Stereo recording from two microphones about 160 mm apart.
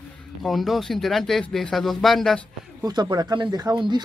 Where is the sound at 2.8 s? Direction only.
25° right (ahead or behind).